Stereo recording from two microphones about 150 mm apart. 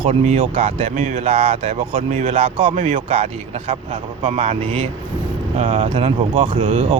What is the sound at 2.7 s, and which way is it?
Speech, 55° right (ahead or behind).